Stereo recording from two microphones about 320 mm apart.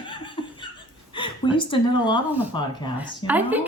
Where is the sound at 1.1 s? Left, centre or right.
Centre.